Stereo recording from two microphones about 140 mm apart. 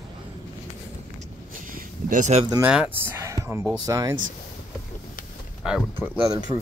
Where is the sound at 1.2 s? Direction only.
75° right (ahead or behind).